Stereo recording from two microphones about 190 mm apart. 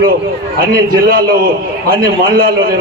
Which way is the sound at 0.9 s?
50° right (ahead or behind).